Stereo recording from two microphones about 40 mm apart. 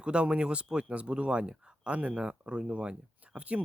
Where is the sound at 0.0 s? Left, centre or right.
Right.